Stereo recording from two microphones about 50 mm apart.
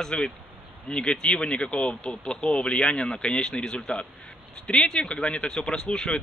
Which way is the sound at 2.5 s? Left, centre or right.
Centre.